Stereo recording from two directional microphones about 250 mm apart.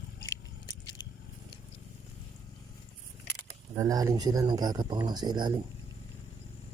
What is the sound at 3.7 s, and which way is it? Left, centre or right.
Speech, centre.